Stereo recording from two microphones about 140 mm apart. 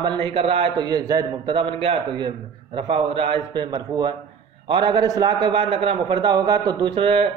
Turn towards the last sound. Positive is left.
turn(degrees=-40)  # may be behind; listen again after turning